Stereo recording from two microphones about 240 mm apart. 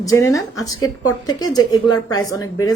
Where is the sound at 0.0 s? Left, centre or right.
Centre.